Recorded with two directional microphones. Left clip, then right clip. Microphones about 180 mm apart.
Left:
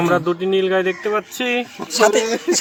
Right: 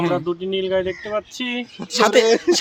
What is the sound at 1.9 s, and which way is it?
Speech, 20° right (ahead or behind).